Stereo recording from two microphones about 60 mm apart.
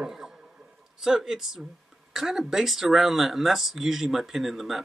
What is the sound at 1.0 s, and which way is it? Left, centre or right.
Speech, centre.